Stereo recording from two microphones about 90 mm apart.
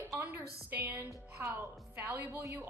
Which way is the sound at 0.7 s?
20° right (ahead or behind).